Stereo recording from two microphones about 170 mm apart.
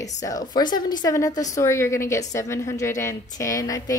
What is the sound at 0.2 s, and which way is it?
A woman's voice, 20° left (ahead or behind).